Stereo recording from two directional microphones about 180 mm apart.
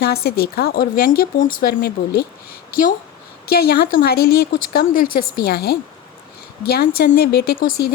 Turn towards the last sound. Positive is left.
turn(degrees=65)  # may be behind; listen again after turning